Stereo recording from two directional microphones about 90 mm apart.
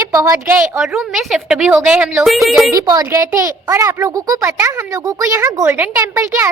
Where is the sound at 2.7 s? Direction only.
40° right (ahead or behind).